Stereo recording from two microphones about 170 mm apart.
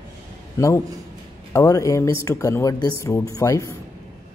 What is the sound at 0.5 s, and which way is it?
A man's voice, 15° left (ahead or behind).